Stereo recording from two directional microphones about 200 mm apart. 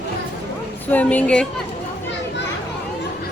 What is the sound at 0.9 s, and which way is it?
Speech, 5° left (ahead or behind).